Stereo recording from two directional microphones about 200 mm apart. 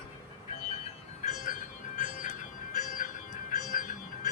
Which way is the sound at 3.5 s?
45° left (ahead or behind).